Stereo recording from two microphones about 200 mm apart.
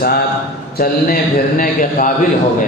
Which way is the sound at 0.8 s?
45° left (ahead or behind).